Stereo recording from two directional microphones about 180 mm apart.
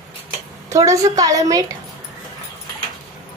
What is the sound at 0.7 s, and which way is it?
Speech, 20° right (ahead or behind).